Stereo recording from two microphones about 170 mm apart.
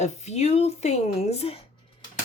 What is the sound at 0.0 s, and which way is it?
Speech, 40° left (ahead or behind).